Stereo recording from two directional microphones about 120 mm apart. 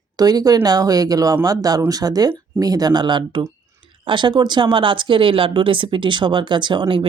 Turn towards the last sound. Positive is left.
turn(degrees=-45)  # may be behind; listen again after turning